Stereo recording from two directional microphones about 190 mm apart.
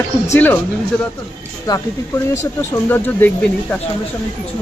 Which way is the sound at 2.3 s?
10° left (ahead or behind).